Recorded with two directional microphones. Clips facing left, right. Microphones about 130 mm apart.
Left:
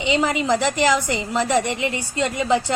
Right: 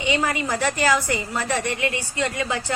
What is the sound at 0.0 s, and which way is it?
A woman's voice, 20° left (ahead or behind).